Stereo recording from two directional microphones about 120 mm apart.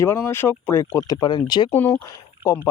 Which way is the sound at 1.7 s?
15° left (ahead or behind).